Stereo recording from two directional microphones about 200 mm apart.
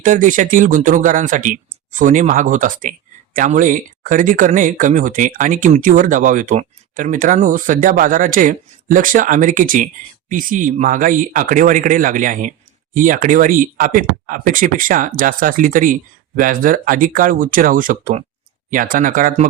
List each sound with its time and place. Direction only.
0.0 s speech: 40° right (ahead or behind)